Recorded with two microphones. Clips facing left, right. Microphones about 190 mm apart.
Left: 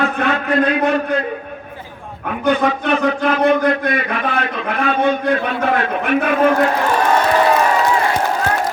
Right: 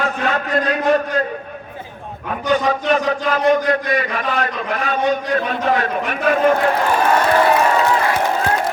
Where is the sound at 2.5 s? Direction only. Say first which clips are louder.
Left 1 dB; 60° left (ahead or behind).